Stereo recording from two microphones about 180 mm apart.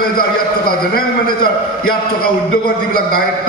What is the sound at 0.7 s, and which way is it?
A man's voice, 55° left (ahead or behind).